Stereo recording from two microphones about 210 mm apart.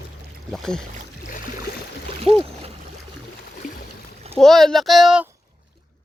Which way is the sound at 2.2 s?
25° right (ahead or behind).